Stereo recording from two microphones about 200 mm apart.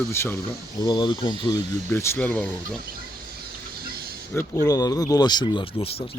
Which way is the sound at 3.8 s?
50° right (ahead or behind).